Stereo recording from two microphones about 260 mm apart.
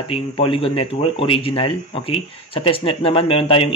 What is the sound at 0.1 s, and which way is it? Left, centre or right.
Speech, left.